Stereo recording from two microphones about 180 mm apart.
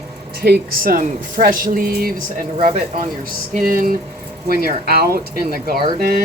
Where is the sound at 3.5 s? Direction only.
50° right (ahead or behind).